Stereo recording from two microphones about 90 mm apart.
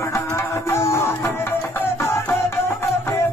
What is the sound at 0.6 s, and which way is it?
Music, 30° left (ahead or behind).